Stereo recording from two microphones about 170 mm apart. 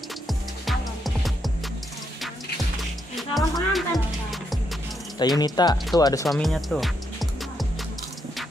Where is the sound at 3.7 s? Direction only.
Centre (ahead or behind).